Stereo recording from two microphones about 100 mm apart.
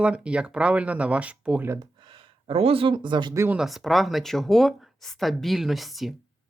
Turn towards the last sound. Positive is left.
turn(degrees=0)  # may be behind; listen again after turning